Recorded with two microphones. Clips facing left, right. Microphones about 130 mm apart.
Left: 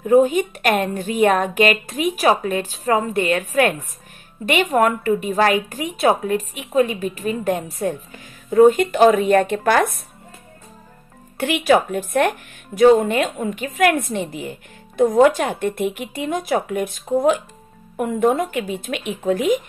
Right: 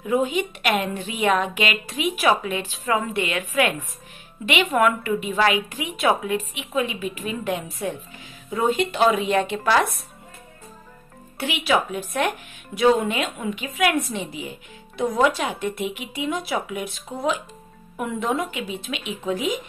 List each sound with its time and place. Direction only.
0.0 s a woman's voice: 45° left (ahead or behind)
11.3 s speech: 50° left (ahead or behind)